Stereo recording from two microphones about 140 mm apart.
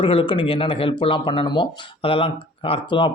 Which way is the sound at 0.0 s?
40° left (ahead or behind).